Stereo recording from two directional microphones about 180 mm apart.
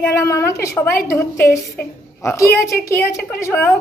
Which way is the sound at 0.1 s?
15° left (ahead or behind).